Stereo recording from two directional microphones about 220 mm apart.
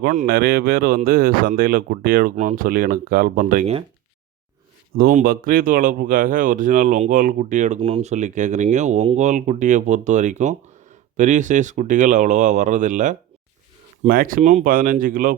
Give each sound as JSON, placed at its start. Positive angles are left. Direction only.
{"t": 0.0, "sound": "speech", "side_deg": -35}
{"t": 4.9, "sound": "speech", "side_deg": -40}